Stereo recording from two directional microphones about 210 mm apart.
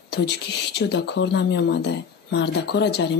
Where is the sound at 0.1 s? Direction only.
55° left (ahead or behind).